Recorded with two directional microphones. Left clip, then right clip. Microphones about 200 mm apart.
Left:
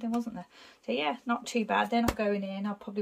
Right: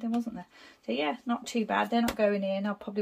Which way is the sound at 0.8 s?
5° left (ahead or behind).